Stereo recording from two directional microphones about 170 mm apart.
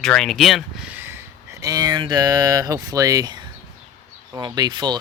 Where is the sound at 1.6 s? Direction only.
20° right (ahead or behind).